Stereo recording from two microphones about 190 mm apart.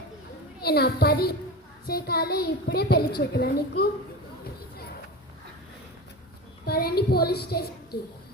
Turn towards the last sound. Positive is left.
turn(degrees=55)  # may be behind; listen again after turning